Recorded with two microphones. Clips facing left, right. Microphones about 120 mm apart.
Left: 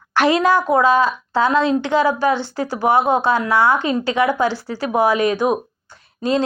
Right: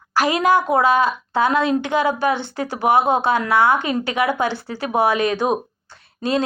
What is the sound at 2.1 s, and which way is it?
Speech, 55° right (ahead or behind).